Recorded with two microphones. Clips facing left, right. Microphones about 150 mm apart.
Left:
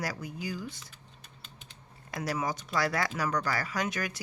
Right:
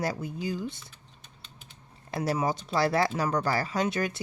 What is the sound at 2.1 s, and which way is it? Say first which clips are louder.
Speech: right 5 dB; 30° right (ahead or behind).